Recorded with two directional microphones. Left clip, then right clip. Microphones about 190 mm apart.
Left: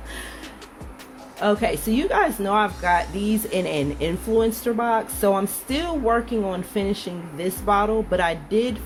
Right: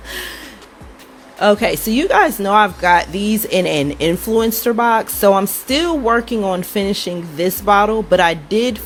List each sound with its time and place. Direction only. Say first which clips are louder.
0.1 s music: right 9 dB; 50° right (ahead or behind)
1.4 s speech: right 8 dB; 50° right (ahead or behind)